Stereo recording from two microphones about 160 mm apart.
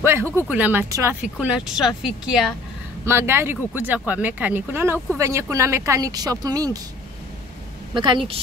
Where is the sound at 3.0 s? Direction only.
15° right (ahead or behind).